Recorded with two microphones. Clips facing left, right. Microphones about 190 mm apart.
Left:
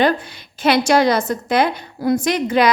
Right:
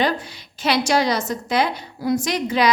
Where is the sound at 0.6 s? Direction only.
55° left (ahead or behind).